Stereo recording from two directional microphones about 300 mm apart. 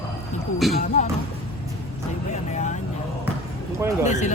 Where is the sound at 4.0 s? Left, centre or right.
Left.